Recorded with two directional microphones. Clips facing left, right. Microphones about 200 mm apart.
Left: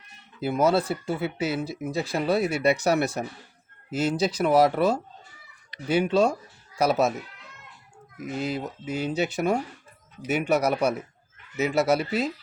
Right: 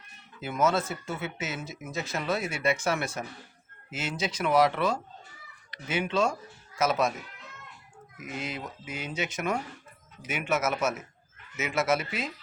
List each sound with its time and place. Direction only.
0.3 s speech: 35° left (ahead or behind)
8.2 s speech: 35° left (ahead or behind)